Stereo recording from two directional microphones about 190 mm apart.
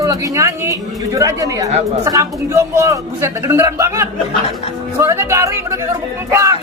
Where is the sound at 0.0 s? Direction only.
15° right (ahead or behind).